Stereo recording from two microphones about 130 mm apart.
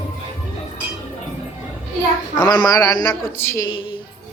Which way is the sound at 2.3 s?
35° left (ahead or behind).